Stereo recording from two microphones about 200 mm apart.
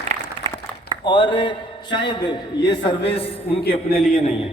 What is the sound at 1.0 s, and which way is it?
A man's voice, 25° left (ahead or behind).